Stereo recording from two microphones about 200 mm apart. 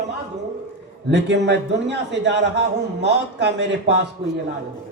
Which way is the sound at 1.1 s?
60° right (ahead or behind).